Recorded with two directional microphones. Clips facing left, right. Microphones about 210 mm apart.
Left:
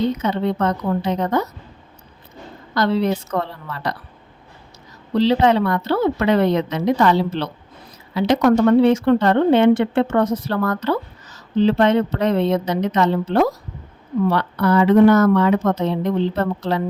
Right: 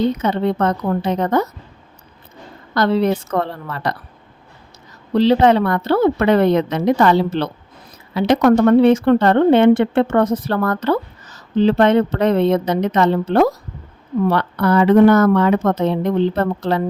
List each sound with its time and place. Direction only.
0.2 s a woman's voice: 55° right (ahead or behind)
2.7 s a woman's voice: 55° right (ahead or behind)
5.1 s a woman's voice: 55° right (ahead or behind)